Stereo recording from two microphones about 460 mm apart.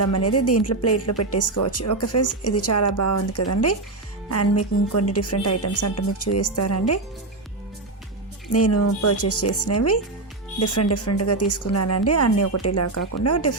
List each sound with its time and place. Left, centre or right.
0.0 s a woman's voice: left
8.5 s a woman's voice: left